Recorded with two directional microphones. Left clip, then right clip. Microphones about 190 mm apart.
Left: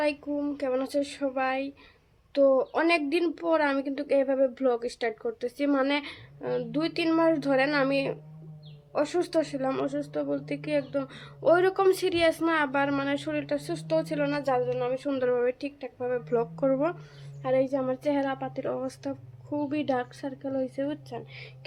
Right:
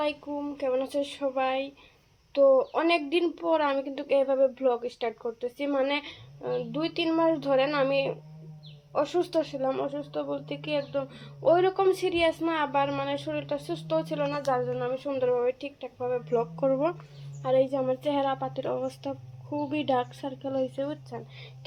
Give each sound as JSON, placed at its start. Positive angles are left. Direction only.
{"t": 0.0, "sound": "a woman's voice", "side_deg": 20}
{"t": 20.7, "sound": "a woman's voice", "side_deg": 20}